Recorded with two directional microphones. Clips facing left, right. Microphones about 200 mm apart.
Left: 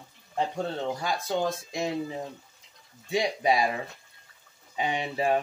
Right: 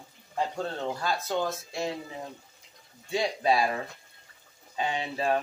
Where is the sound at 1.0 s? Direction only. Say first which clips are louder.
Even; 15° left (ahead or behind).